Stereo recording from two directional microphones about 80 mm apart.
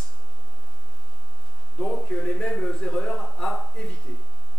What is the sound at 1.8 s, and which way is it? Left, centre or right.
Speech, centre.